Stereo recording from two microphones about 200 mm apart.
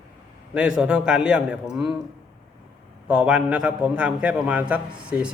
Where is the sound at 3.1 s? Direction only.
5° right (ahead or behind).